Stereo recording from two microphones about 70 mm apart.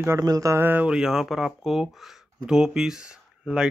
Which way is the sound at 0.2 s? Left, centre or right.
Right.